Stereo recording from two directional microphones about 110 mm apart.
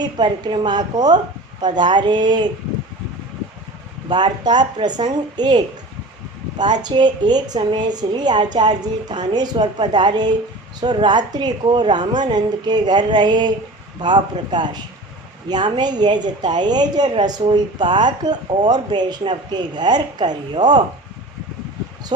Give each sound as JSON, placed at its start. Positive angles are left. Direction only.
{"t": 0.0, "sound": "a woman's voice", "side_deg": -40}
{"t": 4.1, "sound": "a woman's voice", "side_deg": -40}